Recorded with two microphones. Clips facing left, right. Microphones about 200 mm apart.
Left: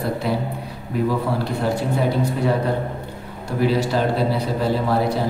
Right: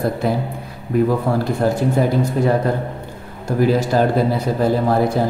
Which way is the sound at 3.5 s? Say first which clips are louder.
Right 4 dB; 45° right (ahead or behind).